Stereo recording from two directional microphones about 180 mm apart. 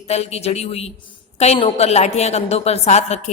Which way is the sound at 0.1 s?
35° left (ahead or behind).